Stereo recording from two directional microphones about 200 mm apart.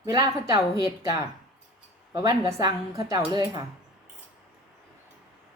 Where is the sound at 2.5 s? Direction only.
15° right (ahead or behind).